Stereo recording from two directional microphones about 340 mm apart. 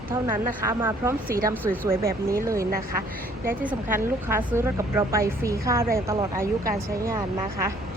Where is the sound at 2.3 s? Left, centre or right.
Centre.